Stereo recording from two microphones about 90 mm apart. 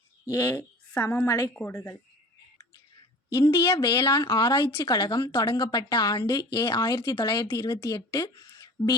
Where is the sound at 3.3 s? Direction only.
45° left (ahead or behind).